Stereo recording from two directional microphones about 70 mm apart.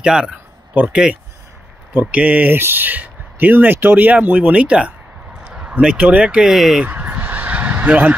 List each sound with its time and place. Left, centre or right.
0.0 s speech: centre
6.5 s speech: centre
6.8 s honk: right